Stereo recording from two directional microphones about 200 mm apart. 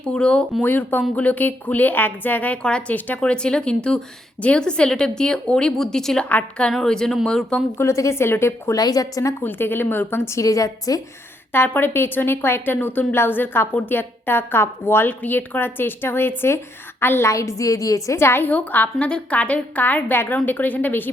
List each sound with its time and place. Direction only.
0.0 s speech: 5° left (ahead or behind)